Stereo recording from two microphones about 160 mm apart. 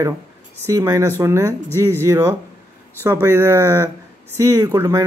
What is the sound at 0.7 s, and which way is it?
Speech, 20° right (ahead or behind).